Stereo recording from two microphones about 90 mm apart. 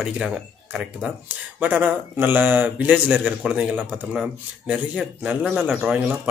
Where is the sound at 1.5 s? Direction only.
20° right (ahead or behind).